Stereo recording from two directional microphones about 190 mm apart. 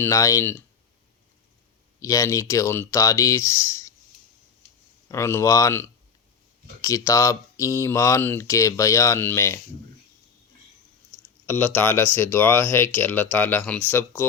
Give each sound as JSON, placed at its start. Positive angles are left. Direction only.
{"t": 0.0, "sound": "speech", "side_deg": 15}
{"t": 2.0, "sound": "speech", "side_deg": 15}
{"t": 5.0, "sound": "speech", "side_deg": 15}
{"t": 6.8, "sound": "speech", "side_deg": 15}
{"t": 11.4, "sound": "speech", "side_deg": 10}